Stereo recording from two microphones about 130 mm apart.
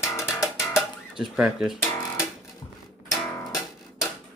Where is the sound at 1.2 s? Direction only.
5° right (ahead or behind).